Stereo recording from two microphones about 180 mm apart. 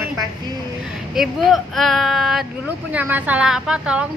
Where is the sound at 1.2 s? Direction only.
Centre (ahead or behind).